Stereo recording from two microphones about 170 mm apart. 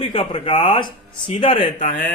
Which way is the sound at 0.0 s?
30° left (ahead or behind).